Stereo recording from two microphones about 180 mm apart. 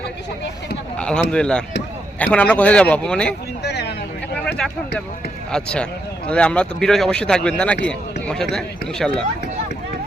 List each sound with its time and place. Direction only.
0.9 s speech: 5° left (ahead or behind)
3.6 s a sound: 70° left (ahead or behind)
5.5 s speech: 5° left (ahead or behind)